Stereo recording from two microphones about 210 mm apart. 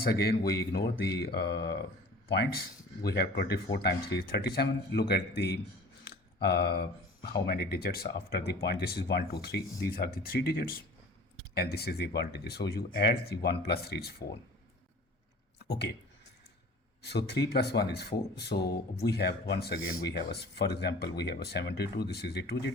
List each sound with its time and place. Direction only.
0.0 s speech: 45° left (ahead or behind)
6.1 s a sound: 50° left (ahead or behind)
7.4 s speech: 50° left (ahead or behind)
17.0 s speech: 50° left (ahead or behind)